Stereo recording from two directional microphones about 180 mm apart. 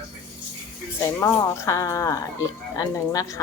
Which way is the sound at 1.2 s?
15° left (ahead or behind).